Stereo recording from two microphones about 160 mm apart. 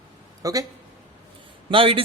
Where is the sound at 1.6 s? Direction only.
35° right (ahead or behind).